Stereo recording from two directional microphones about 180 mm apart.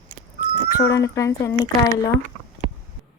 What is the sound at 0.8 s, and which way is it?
A woman's voice, 20° left (ahead or behind).